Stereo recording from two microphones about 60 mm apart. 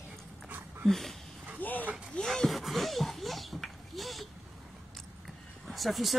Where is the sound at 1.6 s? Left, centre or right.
Left.